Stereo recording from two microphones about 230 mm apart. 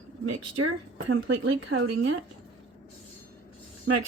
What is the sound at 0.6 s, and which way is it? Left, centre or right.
Speech, right.